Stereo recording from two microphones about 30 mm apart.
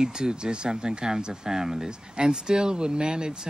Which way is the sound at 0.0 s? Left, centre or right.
Right.